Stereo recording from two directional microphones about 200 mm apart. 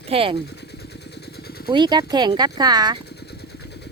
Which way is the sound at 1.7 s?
20° right (ahead or behind).